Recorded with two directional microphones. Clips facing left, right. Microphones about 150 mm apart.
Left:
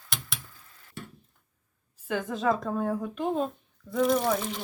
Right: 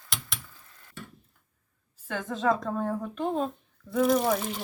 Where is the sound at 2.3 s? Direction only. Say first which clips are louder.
Right 2 dB; 5° left (ahead or behind).